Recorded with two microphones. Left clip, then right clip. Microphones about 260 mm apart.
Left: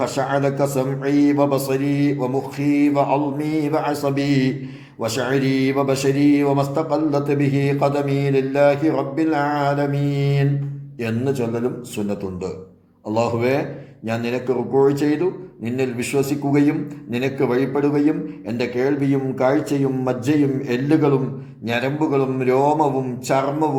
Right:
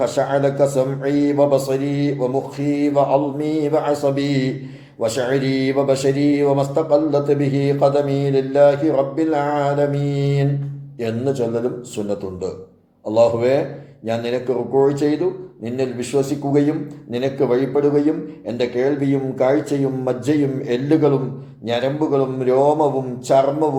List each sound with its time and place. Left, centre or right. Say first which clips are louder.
0.0 s speech: right 3 dB; left